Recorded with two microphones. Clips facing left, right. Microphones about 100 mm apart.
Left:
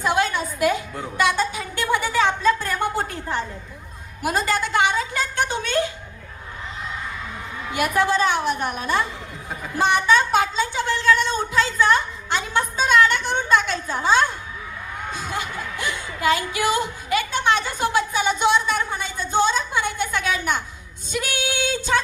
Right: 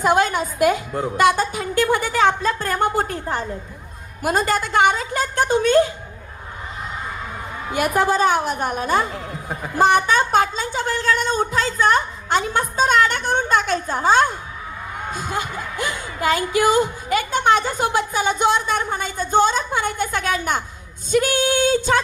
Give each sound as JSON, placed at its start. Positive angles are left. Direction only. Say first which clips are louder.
{"t": 0.0, "sound": "a woman's voice", "louder": "right 4 dB", "side_deg": -45}
{"t": 7.7, "sound": "a woman's voice", "louder": "right 2 dB", "side_deg": -40}